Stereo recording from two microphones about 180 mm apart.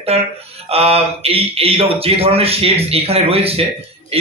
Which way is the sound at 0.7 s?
35° right (ahead or behind).